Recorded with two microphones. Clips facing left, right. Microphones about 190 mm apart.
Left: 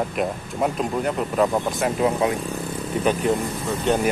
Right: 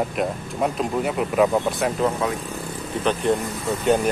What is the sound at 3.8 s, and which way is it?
Speech, centre (ahead or behind).